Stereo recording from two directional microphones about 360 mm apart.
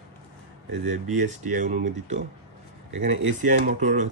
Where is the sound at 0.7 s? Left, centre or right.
Right.